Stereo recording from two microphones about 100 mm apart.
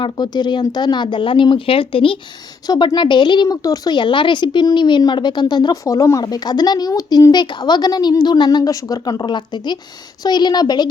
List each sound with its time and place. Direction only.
0.0 s a woman's voice: 45° left (ahead or behind); by 2.1 s 65° left (ahead or behind)
2.6 s a woman's voice: 50° left (ahead or behind)